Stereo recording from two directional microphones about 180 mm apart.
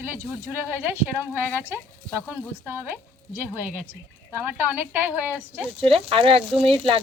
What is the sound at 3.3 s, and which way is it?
Speech, 10° right (ahead or behind).